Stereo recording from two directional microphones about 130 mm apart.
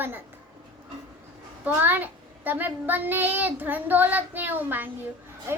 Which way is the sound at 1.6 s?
15° right (ahead or behind).